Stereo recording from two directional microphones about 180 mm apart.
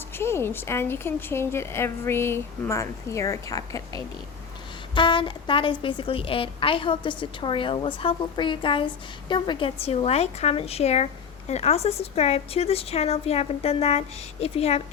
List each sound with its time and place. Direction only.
0.2 s a woman's voice: 15° left (ahead or behind); by 14.8 s 35° left (ahead or behind)